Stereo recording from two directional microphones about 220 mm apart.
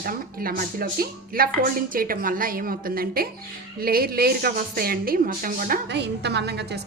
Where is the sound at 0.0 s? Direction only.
40° right (ahead or behind).